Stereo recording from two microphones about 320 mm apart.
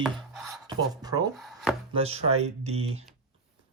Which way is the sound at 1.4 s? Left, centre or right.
Centre.